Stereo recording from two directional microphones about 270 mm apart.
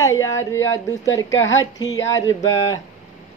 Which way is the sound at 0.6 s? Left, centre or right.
Left.